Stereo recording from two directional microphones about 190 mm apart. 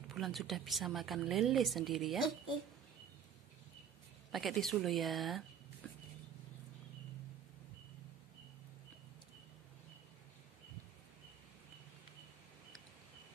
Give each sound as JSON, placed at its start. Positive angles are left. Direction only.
{"t": 0.1, "sound": "a woman's voice", "side_deg": 0}
{"t": 4.3, "sound": "a woman's voice", "side_deg": 0}